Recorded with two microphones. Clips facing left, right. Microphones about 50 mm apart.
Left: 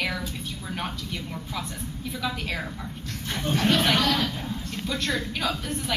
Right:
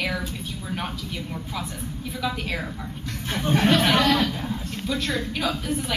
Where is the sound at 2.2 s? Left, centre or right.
Centre.